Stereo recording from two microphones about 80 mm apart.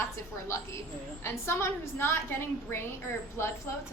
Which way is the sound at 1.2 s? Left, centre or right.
Left.